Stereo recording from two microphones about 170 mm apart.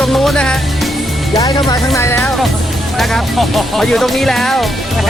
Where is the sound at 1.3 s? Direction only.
20° left (ahead or behind).